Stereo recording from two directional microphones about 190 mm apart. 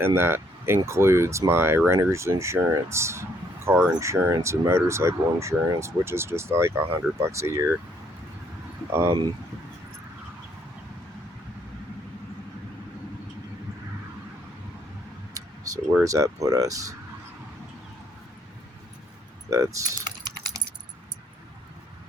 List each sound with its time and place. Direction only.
0.0 s speech: 10° right (ahead or behind)
8.9 s speech: 10° right (ahead or behind)
15.6 s speech: 15° right (ahead or behind)
19.5 s speech: 15° right (ahead or behind)